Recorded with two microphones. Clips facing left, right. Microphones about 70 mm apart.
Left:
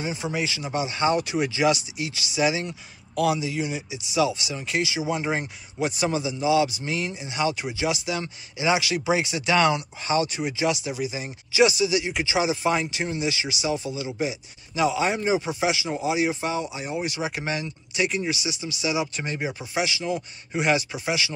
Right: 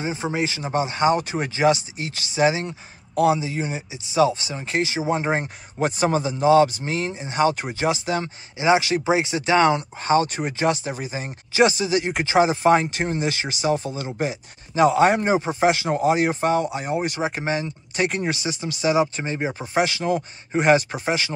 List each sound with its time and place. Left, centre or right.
0.0 s speech: right
18.0 s speech: right